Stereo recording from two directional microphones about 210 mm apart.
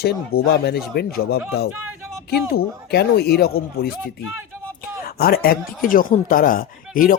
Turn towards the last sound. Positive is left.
turn(degrees=40)  # may be behind; listen again after turning